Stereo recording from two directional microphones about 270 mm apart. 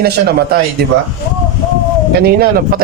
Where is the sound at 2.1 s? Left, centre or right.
Right.